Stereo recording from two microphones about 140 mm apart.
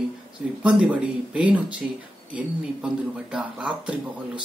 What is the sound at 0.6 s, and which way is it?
Speech, 10° right (ahead or behind).